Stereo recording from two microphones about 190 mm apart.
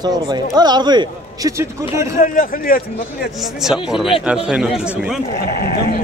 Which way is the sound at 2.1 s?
45° left (ahead or behind).